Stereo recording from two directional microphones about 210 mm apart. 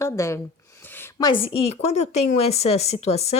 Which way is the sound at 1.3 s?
25° left (ahead or behind).